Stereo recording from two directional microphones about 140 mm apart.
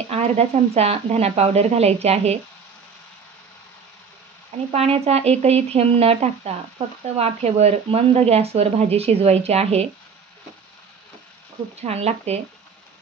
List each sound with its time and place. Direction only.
0.1 s speech: 50° right (ahead or behind)
4.7 s speech: 45° right (ahead or behind)
11.8 s speech: 50° right (ahead or behind)